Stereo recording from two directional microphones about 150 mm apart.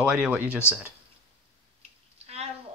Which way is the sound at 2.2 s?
45° right (ahead or behind).